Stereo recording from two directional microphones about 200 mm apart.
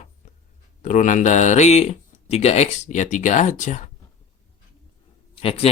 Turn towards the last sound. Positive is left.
turn(degrees=30)  # may be behind; listen again after turning